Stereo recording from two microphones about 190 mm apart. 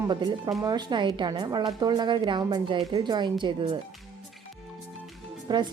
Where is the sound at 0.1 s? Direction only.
25° right (ahead or behind).